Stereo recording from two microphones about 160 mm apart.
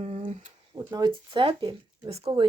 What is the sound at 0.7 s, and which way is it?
Speech, 25° right (ahead or behind).